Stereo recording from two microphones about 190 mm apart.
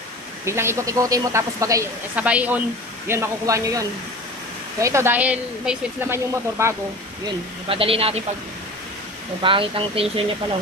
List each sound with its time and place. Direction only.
0.5 s speech: 15° right (ahead or behind)
7.2 s speech: 30° right (ahead or behind)
9.4 s speech: 25° right (ahead or behind)